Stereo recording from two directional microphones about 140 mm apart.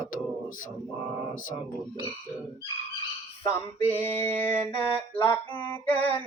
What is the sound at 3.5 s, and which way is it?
Mantra, 15° left (ahead or behind).